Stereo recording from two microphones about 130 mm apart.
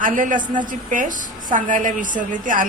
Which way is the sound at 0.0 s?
90° right.